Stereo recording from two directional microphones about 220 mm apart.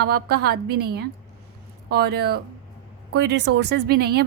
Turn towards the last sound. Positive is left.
turn(degrees=-45)  # may be behind; listen again after turning